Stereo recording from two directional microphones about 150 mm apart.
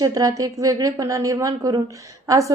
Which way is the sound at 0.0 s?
25° right (ahead or behind).